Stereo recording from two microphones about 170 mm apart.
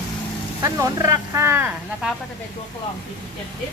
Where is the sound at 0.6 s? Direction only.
20° right (ahead or behind).